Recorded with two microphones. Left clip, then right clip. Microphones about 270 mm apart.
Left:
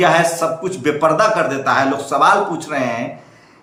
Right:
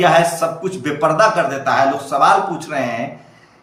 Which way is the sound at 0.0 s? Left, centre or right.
Centre.